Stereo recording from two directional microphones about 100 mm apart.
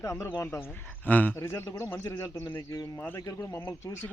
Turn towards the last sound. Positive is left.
turn(degrees=25)  # may be behind; listen again after turning